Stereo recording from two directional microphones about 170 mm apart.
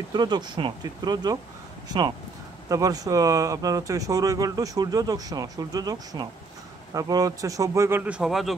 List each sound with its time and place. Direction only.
0.1 s speech: 25° right (ahead or behind); by 8.5 s centre (ahead or behind)